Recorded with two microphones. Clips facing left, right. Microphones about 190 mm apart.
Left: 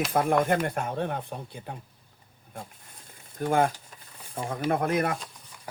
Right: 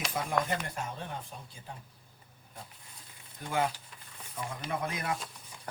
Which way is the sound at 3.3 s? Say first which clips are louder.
Left 8 dB; 50° left (ahead or behind).